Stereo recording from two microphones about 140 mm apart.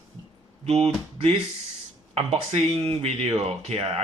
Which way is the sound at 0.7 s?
50° right (ahead or behind).